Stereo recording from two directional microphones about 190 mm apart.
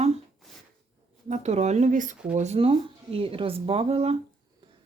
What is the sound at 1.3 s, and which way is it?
Speech, 35° right (ahead or behind).